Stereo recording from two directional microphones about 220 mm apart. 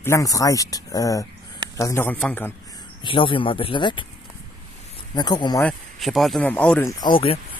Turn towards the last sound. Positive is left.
turn(degrees=25)  # may be behind; listen again after turning